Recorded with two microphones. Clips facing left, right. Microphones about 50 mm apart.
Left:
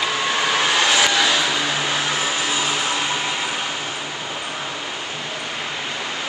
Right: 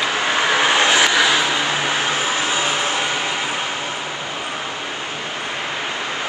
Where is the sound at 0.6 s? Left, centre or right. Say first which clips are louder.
Right 2 dB; right.